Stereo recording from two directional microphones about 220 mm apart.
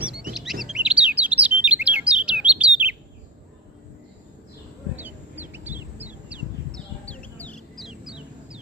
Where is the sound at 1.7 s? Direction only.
5° right (ahead or behind).